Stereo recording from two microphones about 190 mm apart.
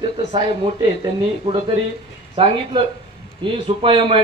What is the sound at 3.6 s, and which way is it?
Speech, 30° right (ahead or behind).